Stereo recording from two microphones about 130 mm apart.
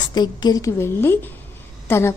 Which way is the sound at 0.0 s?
35° left (ahead or behind).